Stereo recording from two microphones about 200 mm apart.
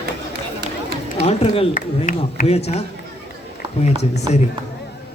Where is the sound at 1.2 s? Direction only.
30° left (ahead or behind).